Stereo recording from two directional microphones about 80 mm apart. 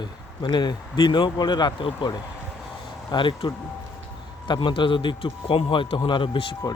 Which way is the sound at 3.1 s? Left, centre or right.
Left.